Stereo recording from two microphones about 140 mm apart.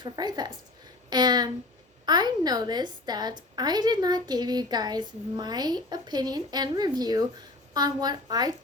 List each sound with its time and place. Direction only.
0.0 s a woman's voice: 30° right (ahead or behind)